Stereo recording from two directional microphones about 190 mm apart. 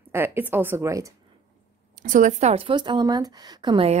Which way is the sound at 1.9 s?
45° right (ahead or behind).